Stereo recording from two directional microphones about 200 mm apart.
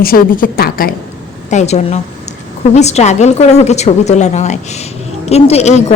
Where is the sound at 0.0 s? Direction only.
45° left (ahead or behind).